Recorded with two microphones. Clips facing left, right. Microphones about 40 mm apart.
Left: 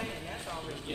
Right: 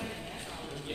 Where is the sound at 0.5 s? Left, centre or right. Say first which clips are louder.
Left 2 dB; centre.